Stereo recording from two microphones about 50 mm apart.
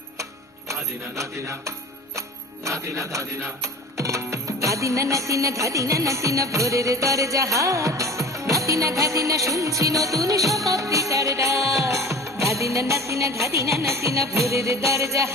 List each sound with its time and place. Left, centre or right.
0.7 s music: right
2.8 s music: right